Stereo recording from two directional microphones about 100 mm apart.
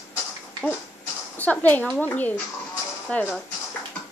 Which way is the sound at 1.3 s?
15° left (ahead or behind).